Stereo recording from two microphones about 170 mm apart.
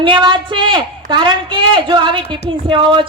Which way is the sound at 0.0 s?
30° right (ahead or behind).